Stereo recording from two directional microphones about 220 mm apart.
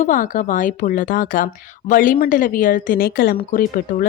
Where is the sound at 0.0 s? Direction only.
35° left (ahead or behind).